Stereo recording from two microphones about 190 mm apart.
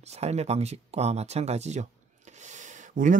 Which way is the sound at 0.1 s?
35° right (ahead or behind).